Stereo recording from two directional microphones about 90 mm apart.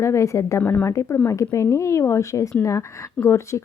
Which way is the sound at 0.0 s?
35° left (ahead or behind).